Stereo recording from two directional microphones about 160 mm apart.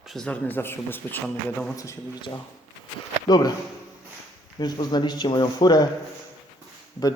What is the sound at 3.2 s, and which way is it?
Speech, 25° left (ahead or behind).